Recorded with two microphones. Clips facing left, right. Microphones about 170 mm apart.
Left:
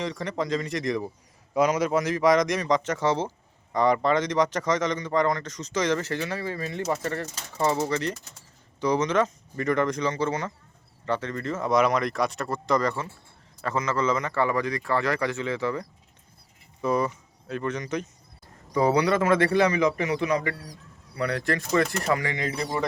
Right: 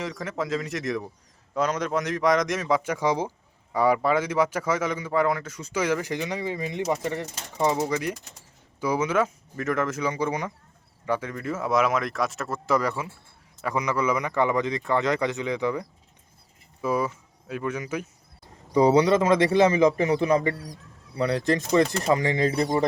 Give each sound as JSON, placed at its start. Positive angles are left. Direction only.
{"t": 0.0, "sound": "speech", "side_deg": 0}
{"t": 1.5, "sound": "a man's voice", "side_deg": 10}
{"t": 18.7, "sound": "a man's voice", "side_deg": -20}